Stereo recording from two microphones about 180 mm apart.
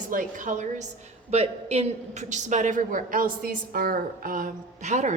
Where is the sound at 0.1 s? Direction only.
50° right (ahead or behind).